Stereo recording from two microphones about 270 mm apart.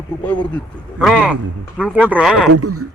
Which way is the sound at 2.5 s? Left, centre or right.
Right.